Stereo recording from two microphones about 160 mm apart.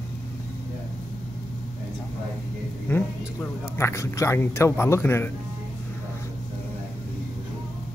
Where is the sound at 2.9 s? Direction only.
15° left (ahead or behind).